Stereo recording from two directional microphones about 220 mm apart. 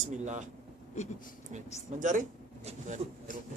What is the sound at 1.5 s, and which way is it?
Speech, 35° right (ahead or behind).